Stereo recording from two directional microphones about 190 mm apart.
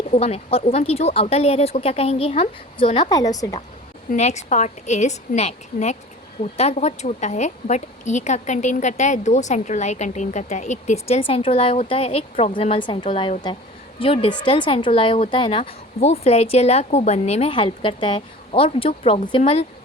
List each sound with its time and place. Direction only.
0.1 s a woman's voice: 35° left (ahead or behind)
4.1 s a woman's voice: 35° left (ahead or behind)